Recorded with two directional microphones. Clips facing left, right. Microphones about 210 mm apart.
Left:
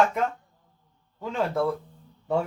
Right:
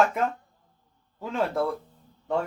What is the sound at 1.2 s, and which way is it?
Speech, centre (ahead or behind).